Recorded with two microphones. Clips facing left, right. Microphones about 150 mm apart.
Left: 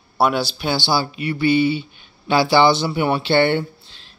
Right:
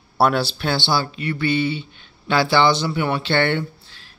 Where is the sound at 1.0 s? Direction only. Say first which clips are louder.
Left 3 dB; 15° left (ahead or behind).